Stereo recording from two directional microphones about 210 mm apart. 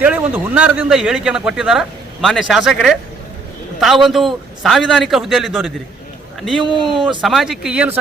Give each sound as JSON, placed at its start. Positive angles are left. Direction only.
{"t": 0.0, "sound": "a man's voice", "side_deg": -10}